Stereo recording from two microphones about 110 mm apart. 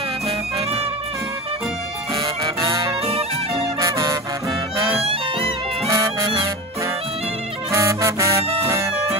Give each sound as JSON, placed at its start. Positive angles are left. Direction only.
{"t": 0.6, "sound": "music", "side_deg": -60}
{"t": 3.8, "sound": "music", "side_deg": -30}
{"t": 5.0, "sound": "music", "side_deg": -60}
{"t": 5.9, "sound": "music", "side_deg": -30}
{"t": 7.7, "sound": "music", "side_deg": -30}